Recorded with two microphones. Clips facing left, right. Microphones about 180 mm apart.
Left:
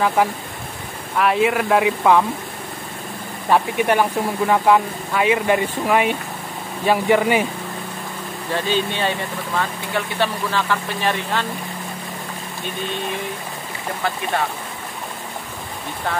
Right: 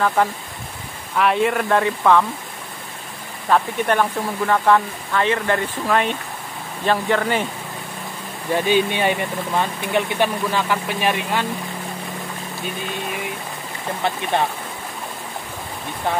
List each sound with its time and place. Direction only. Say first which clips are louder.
0.2 s speech: left 1 dB; 10° left (ahead or behind)
3.4 s speech: left 1 dB; 10° left (ahead or behind)
8.5 s speech: right 3 dB; 15° right (ahead or behind)
14.3 s speech: right 3 dB; 20° right (ahead or behind)